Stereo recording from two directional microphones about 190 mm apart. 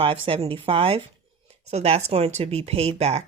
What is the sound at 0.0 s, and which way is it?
A woman's voice, 30° right (ahead or behind).